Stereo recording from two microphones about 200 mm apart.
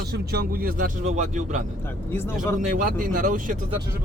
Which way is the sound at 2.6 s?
40° right (ahead or behind).